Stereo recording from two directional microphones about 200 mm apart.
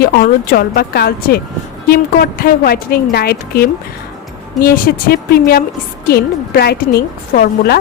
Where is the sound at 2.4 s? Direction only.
50° left (ahead or behind).